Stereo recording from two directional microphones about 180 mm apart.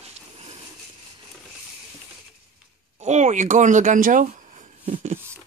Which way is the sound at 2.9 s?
40° right (ahead or behind).